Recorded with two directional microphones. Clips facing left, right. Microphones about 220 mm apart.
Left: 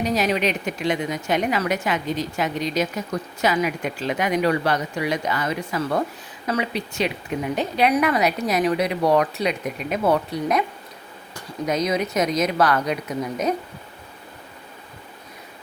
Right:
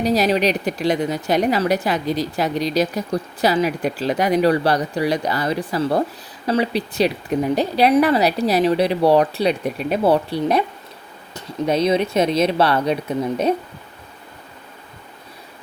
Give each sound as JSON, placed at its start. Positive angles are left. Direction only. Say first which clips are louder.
{"t": 0.0, "sound": "a woman's voice", "louder": "right 4 dB", "side_deg": -35}